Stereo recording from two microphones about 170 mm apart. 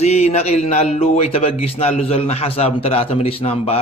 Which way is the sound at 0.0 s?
40° left (ahead or behind).